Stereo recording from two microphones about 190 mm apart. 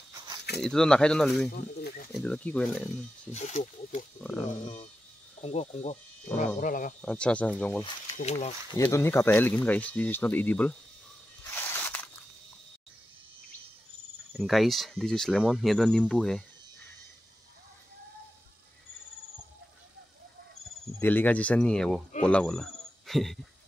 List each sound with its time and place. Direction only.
0.6 s speech: 5° left (ahead or behind)
1.5 s speech: 55° left (ahead or behind)
2.1 s speech: 5° left (ahead or behind)
3.3 s speech: 35° left (ahead or behind)
5.4 s speech: 35° left (ahead or behind)
7.0 s speech: 5° left (ahead or behind)
8.2 s speech: 35° left (ahead or behind)
8.7 s speech: 15° left (ahead or behind)
11.5 s a sound: 10° left (ahead or behind)
14.3 s speech: centre (ahead or behind)
21.0 s speech: 10° left (ahead or behind)